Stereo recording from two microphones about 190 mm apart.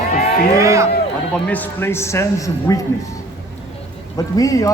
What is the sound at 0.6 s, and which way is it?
Speech, 15° right (ahead or behind).